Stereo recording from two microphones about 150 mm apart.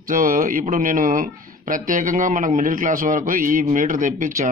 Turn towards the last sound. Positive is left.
turn(degrees=-60)  # may be behind; listen again after turning